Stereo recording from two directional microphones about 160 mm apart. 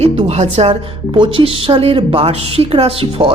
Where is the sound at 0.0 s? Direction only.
40° right (ahead or behind).